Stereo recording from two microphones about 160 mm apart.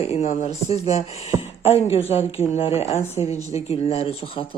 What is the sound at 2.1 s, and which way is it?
Speech, 40° left (ahead or behind).